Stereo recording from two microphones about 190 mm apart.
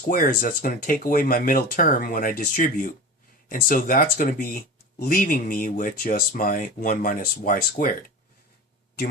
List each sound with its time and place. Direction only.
0.1 s speech: 45° left (ahead or behind)